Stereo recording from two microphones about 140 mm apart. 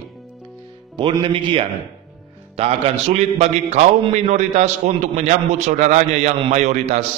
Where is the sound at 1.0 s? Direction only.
35° right (ahead or behind); by 7.0 s 55° right (ahead or behind).